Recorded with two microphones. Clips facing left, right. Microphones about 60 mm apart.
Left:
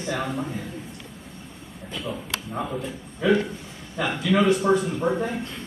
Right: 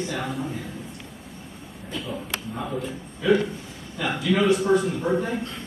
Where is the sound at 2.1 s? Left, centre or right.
Centre.